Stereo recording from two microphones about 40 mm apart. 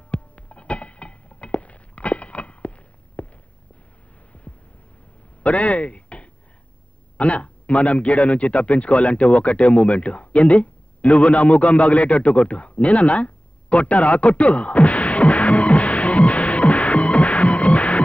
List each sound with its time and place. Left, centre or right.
0.1 s a sound: left
5.4 s speech: left
7.2 s radio: left